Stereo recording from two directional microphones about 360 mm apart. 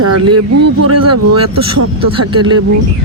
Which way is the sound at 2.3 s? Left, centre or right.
Centre.